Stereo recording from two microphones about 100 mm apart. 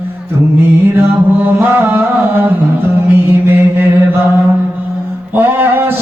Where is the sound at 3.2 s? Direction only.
25° right (ahead or behind).